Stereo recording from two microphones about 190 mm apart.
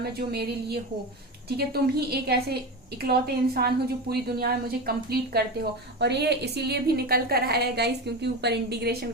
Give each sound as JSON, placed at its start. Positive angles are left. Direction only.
{"t": 0.0, "sound": "a woman's voice", "side_deg": -55}